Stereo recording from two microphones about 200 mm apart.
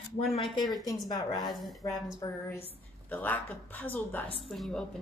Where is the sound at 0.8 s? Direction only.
20° left (ahead or behind).